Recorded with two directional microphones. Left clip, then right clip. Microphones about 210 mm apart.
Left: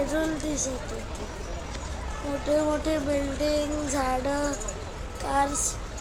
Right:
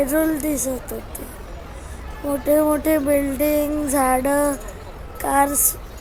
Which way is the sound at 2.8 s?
45° right (ahead or behind).